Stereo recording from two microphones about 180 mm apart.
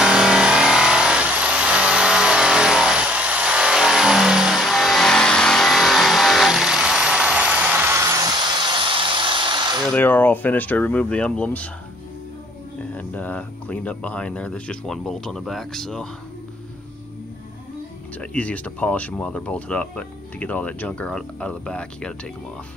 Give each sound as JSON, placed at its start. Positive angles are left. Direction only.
{"t": 0.0, "sound": "vehicle", "side_deg": -5}
{"t": 8.8, "sound": "a sound", "side_deg": -30}
{"t": 9.9, "sound": "speech", "side_deg": 10}
{"t": 12.9, "sound": "speech", "side_deg": 10}
{"t": 18.2, "sound": "speech", "side_deg": 5}